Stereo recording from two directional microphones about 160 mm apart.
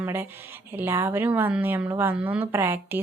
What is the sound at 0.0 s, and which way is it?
Speech, 15° right (ahead or behind).